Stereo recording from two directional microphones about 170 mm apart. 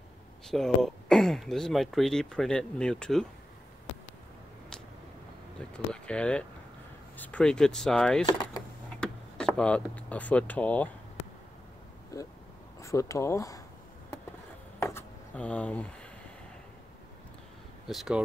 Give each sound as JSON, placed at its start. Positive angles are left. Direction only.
{"t": 0.5, "sound": "speech", "side_deg": 0}
{"t": 5.7, "sound": "speech", "side_deg": 5}
{"t": 8.3, "sound": "a sound", "side_deg": 20}
{"t": 9.0, "sound": "speech", "side_deg": 5}
{"t": 12.1, "sound": "speech", "side_deg": 20}
{"t": 14.8, "sound": "a sound", "side_deg": 15}
{"t": 17.8, "sound": "speech", "side_deg": 0}